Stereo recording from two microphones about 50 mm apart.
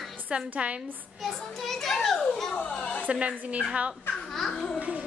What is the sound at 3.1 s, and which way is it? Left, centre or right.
Speech, right.